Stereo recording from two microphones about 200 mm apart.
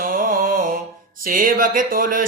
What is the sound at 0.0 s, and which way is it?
Mantra, 45° right (ahead or behind).